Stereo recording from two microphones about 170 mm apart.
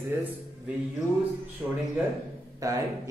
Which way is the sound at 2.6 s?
20° right (ahead or behind).